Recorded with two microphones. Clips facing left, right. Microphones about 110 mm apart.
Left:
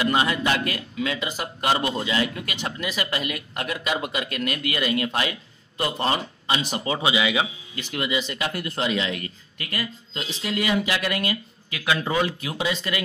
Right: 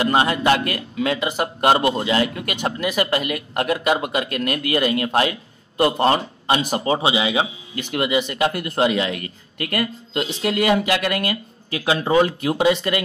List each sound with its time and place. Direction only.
0.0 s a man's voice: 35° right (ahead or behind)
5.8 s speech: 45° right (ahead or behind); by 7.4 s 30° right (ahead or behind)
7.9 s a man's voice: 40° right (ahead or behind)
8.2 s speech: 55° right (ahead or behind)
11.7 s speech: 30° right (ahead or behind)
12.3 s speech: 50° right (ahead or behind)